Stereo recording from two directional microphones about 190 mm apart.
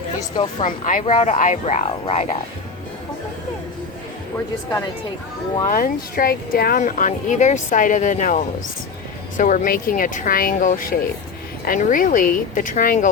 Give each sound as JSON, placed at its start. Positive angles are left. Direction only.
{"t": 0.6, "sound": "speech", "side_deg": 45}
{"t": 5.6, "sound": "speech", "side_deg": 50}